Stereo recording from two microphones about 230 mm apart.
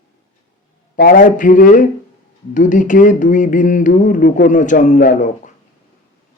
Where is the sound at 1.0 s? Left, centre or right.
Left.